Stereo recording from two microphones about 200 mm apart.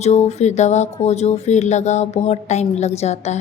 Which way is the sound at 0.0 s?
35° left (ahead or behind).